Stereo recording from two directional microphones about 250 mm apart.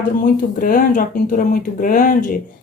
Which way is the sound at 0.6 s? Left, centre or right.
Left.